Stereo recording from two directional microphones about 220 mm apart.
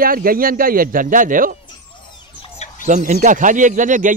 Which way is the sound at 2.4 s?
30° left (ahead or behind).